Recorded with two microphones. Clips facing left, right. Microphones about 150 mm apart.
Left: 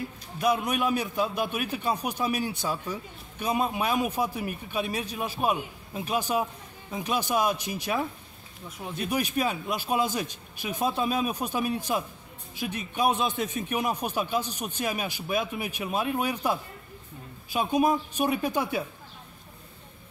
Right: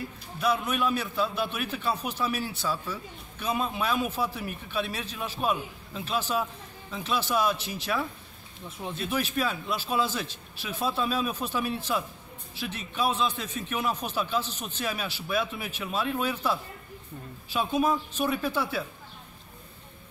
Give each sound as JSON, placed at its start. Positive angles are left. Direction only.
{"t": 0.4, "sound": "a man's voice", "side_deg": 15}